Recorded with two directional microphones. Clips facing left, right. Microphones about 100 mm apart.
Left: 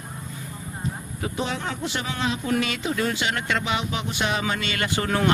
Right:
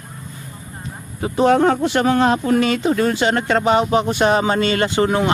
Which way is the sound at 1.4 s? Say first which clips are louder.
Right 16 dB; 50° right (ahead or behind).